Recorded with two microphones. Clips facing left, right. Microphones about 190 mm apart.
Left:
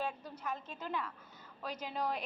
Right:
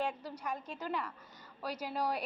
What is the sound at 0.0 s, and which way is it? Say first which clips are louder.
A woman's voice: right 3 dB; 10° right (ahead or behind).